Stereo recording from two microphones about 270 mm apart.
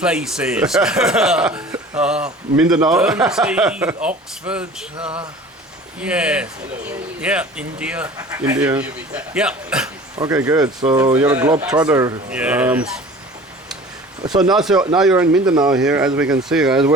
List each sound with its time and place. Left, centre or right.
0.0 s speech: centre
4.9 s speech: centre
6.0 s speech: centre
14.5 s speech: centre
15.4 s speech: centre
15.7 s speech: centre